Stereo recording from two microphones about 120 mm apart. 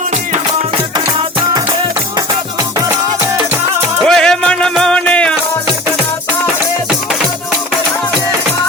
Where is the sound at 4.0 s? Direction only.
5° left (ahead or behind).